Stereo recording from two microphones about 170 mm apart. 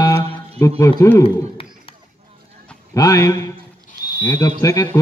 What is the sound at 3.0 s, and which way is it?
A man's voice, 20° left (ahead or behind).